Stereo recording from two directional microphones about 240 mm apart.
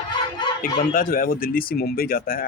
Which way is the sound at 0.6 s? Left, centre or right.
Left.